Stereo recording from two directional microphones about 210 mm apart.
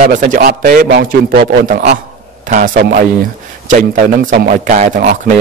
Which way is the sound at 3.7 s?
40° right (ahead or behind).